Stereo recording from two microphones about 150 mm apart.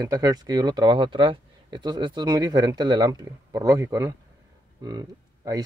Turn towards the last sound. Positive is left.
turn(degrees=-25)  # may be behind; listen again after turning